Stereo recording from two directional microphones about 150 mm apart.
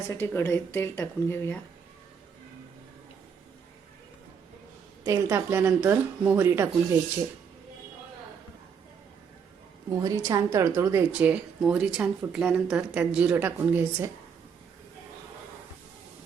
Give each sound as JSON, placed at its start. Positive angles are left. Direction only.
{"t": 0.1, "sound": "speech", "side_deg": 15}
{"t": 5.0, "sound": "speech", "side_deg": -20}
{"t": 10.0, "sound": "a woman's voice", "side_deg": -20}
{"t": 11.1, "sound": "speech", "side_deg": -10}